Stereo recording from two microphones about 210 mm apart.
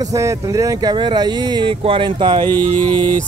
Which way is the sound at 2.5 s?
10° left (ahead or behind).